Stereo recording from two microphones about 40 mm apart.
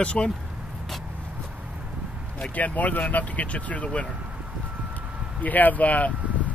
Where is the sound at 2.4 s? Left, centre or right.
Left.